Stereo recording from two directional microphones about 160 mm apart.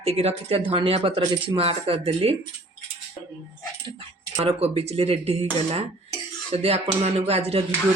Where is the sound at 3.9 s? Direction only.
35° right (ahead or behind).